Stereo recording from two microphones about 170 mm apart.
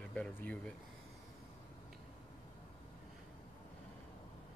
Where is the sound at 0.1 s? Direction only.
10° left (ahead or behind).